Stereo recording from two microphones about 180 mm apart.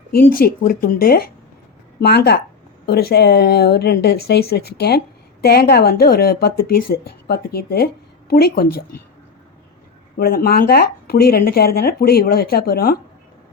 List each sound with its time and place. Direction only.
0.1 s a woman's voice: 55° left (ahead or behind)
10.2 s speech: 60° left (ahead or behind)